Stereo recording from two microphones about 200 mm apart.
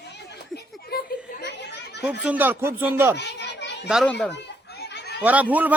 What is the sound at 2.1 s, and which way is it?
A man's voice, 10° right (ahead or behind).